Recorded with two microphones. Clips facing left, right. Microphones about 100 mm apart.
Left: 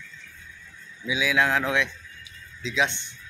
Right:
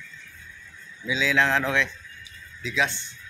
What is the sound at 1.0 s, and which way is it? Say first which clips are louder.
A man's voice: even; 10° left (ahead or behind).